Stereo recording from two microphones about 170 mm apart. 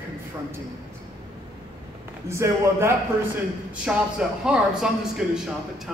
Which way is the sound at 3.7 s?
5° right (ahead or behind).